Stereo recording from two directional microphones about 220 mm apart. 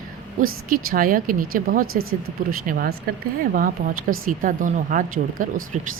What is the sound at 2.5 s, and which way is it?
Speech, 40° right (ahead or behind).